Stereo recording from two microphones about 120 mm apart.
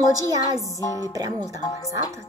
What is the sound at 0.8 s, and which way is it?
Music, 25° left (ahead or behind).